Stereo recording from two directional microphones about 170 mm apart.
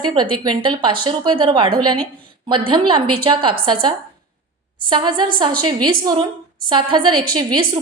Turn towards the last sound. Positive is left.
turn(degrees=-25)  # may be behind; listen again after turning